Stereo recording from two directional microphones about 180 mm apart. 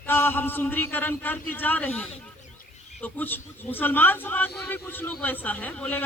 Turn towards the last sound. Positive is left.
turn(degrees=10)  # may be behind; listen again after turning